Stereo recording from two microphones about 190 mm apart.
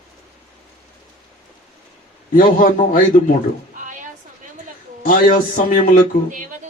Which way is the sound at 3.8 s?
45° right (ahead or behind).